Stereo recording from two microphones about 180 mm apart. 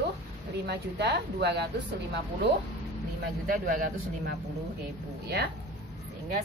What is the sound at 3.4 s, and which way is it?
Speech, 50° right (ahead or behind).